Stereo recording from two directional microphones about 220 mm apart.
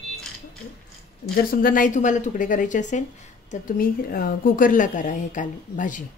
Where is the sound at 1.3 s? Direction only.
40° left (ahead or behind).